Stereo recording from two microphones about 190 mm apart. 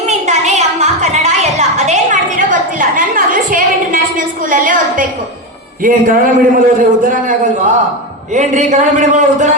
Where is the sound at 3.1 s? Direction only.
45° right (ahead or behind).